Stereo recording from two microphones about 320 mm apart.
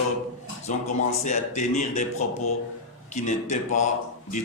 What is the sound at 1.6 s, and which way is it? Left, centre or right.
Speech, left.